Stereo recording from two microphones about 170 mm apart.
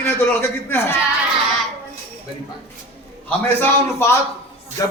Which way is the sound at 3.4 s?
10° left (ahead or behind).